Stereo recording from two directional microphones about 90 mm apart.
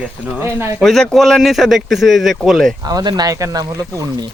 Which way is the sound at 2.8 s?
45° right (ahead or behind).